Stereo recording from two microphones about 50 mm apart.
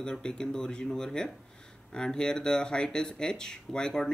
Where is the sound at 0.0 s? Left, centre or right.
Centre.